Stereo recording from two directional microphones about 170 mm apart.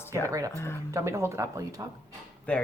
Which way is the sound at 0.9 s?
15° right (ahead or behind).